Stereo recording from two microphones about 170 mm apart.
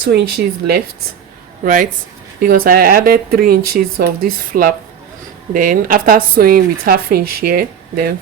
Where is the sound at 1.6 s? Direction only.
50° right (ahead or behind).